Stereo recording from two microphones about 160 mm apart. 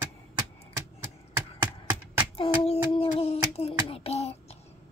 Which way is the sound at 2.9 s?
40° left (ahead or behind).